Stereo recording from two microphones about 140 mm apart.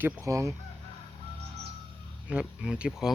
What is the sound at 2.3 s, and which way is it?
Speech, 5° right (ahead or behind).